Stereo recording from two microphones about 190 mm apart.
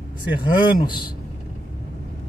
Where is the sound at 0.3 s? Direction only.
25° left (ahead or behind).